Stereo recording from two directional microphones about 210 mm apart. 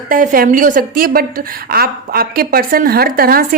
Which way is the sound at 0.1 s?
40° right (ahead or behind).